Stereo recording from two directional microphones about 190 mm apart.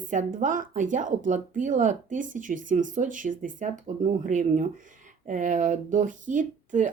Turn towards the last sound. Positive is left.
turn(degrees=-40)  # may be behind; listen again after turning